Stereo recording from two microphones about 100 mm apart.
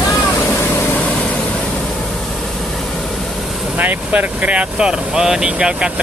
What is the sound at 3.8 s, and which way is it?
Speech, 15° right (ahead or behind).